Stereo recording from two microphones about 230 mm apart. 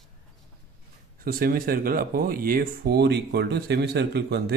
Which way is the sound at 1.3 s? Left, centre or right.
Right.